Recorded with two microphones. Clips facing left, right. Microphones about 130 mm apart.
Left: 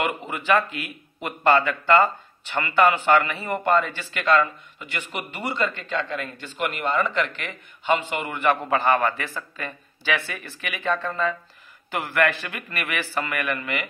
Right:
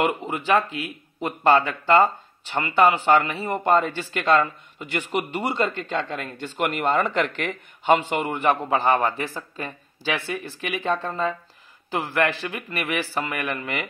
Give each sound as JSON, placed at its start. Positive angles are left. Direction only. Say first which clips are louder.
{"t": 0.0, "sound": "speech", "louder": "right 3 dB", "side_deg": -35}
{"t": 6.4, "sound": "a man's voice", "louder": "right 5 dB", "side_deg": -50}
{"t": 8.3, "sound": "speech", "louder": "left 1 dB", "side_deg": -30}
{"t": 10.4, "sound": "speech", "louder": "right 2 dB", "side_deg": -35}